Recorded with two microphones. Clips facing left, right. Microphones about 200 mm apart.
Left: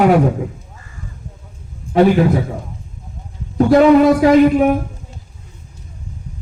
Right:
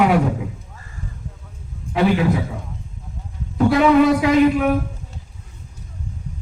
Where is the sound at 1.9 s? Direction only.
45° left (ahead or behind).